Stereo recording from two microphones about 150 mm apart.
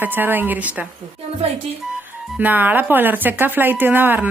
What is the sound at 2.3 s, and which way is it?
A woman's voice, 10° right (ahead or behind).